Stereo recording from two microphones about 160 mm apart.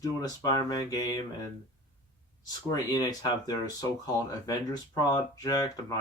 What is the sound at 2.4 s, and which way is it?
Speech, 25° left (ahead or behind).